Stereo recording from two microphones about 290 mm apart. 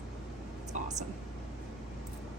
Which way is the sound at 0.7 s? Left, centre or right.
Right.